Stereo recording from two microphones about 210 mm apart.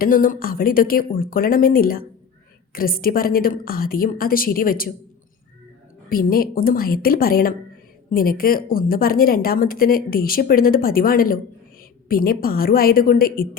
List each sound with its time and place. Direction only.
0.0 s speech: 40° left (ahead or behind)
6.1 s speech: 45° left (ahead or behind)